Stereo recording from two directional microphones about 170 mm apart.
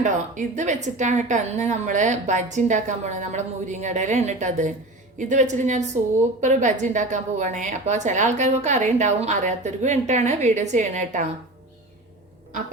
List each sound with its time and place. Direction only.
0.0 s a woman's voice: 45° right (ahead or behind)